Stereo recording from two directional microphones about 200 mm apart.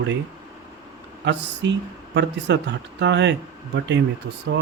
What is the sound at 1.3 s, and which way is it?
Speech, 60° right (ahead or behind).